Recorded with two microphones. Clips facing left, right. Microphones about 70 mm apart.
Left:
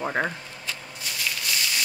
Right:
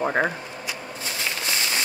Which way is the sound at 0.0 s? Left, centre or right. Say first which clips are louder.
Right 4 dB; centre.